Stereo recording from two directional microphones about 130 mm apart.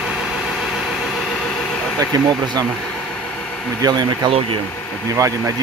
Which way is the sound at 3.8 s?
30° right (ahead or behind).